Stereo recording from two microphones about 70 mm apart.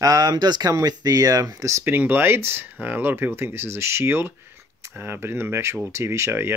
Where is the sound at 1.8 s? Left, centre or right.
Right.